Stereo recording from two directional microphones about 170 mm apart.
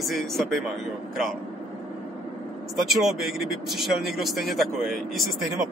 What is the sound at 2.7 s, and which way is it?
Speech, centre (ahead or behind).